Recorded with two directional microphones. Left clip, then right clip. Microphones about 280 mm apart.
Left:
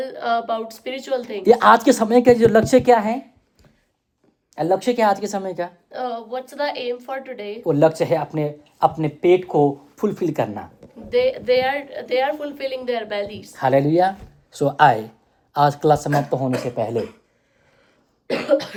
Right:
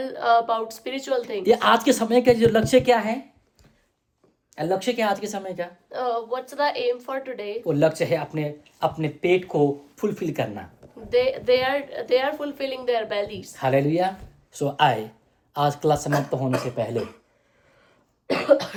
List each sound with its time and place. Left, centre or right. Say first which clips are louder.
0.0 s a woman's voice: right 2 dB; centre
1.5 s speech: left 6 dB; centre
4.5 s speech: left 5 dB; centre
5.9 s a woman's voice: right 5 dB; centre
7.6 s speech: left 5 dB; centre
11.1 s a woman's voice: left 2 dB; centre
13.6 s speech: left 5 dB; centre
18.3 s a woman's voice: even; centre